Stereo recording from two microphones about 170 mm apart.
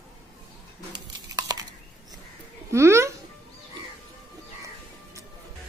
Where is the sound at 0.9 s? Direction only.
25° right (ahead or behind).